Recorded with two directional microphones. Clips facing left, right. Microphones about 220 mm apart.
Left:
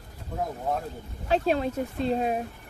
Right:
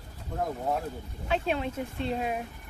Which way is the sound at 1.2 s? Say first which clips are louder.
Left 5 dB; 40° left (ahead or behind).